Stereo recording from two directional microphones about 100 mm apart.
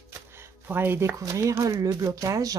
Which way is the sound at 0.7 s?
20° right (ahead or behind).